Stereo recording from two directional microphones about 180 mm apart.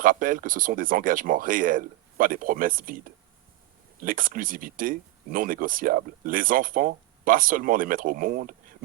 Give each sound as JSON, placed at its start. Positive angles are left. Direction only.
{"t": 0.0, "sound": "speech", "side_deg": -50}
{"t": 4.0, "sound": "speech", "side_deg": -50}